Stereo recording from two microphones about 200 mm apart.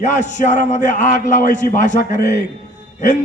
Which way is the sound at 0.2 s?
35° left (ahead or behind).